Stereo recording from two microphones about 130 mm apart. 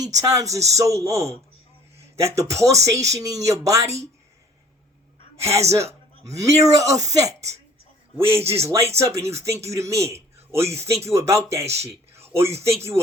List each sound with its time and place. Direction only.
0.0 s speech: 25° right (ahead or behind)
5.4 s a woman's voice: 20° right (ahead or behind)